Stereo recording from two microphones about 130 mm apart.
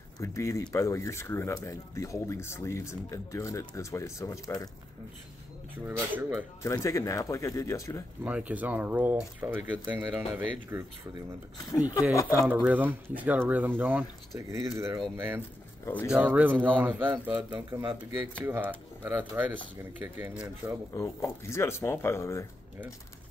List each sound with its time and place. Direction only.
0.2 s speech: 20° left (ahead or behind)
5.9 s speech: 15° right (ahead or behind)
6.6 s speech: 25° left (ahead or behind)
8.2 s speech: 10° right (ahead or behind)
11.7 s speech: 25° left (ahead or behind)
12.6 s speech: 10° right (ahead or behind)
15.8 s speech: 15° left (ahead or behind)
16.1 s speech: 10° right (ahead or behind)
20.9 s speech: 20° left (ahead or behind)